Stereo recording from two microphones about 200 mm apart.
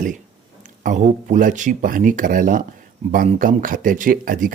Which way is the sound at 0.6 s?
40° right (ahead or behind).